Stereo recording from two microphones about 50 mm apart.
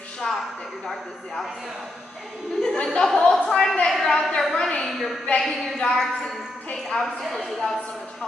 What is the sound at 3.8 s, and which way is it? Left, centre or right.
A woman's voice, centre.